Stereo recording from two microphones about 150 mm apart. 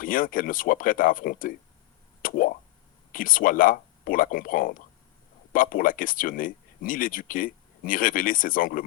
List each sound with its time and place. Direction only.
0.0 s speech: 65° left (ahead or behind)
2.2 s a sound: 65° left (ahead or behind)
3.1 s speech: 65° left (ahead or behind)